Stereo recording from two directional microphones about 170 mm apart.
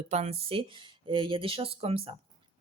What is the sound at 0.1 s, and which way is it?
Speech, 40° right (ahead or behind).